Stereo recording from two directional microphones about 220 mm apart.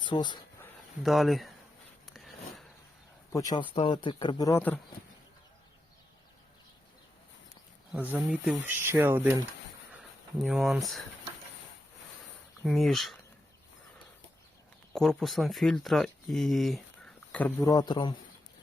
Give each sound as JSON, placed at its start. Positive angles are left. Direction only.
{"t": 0.0, "sound": "a sound", "side_deg": 20}
{"t": 1.0, "sound": "speech", "side_deg": 0}
{"t": 2.1, "sound": "a sound", "side_deg": 0}
{"t": 3.3, "sound": "speech", "side_deg": 20}
{"t": 8.1, "sound": "speech", "side_deg": -5}
{"t": 9.9, "sound": "a sound", "side_deg": 0}
{"t": 12.6, "sound": "speech", "side_deg": 0}
{"t": 14.9, "sound": "speech", "side_deg": 0}
{"t": 17.3, "sound": "a man's voice", "side_deg": 10}